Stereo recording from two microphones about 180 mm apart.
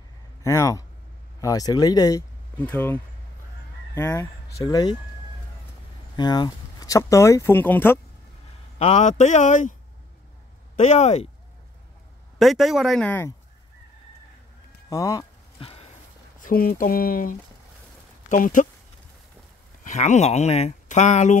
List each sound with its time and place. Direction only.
0.4 s speech: 15° left (ahead or behind)
2.5 s speech: 10° left (ahead or behind)
6.1 s speech: 25° left (ahead or behind)
8.7 s a man's voice: 40° left (ahead or behind)
10.8 s a man's voice: 40° left (ahead or behind)
12.4 s speech: centre (ahead or behind)
14.9 s speech: 20° left (ahead or behind)
15.6 s a sound: 35° left (ahead or behind); by 17.4 s 50° left (ahead or behind)
18.3 s speech: 45° left (ahead or behind)
19.8 s speech: 40° left (ahead or behind)